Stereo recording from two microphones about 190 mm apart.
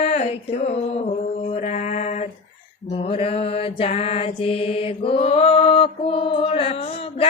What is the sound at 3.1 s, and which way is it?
Mantra, 30° left (ahead or behind).